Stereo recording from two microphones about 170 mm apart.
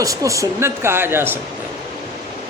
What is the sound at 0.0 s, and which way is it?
A man's voice, 20° right (ahead or behind).